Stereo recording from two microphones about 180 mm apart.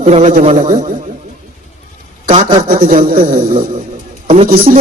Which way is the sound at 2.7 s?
50° right (ahead or behind).